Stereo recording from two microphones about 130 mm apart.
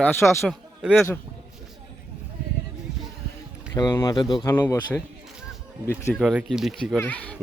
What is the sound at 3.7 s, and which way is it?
Speech, 25° left (ahead or behind).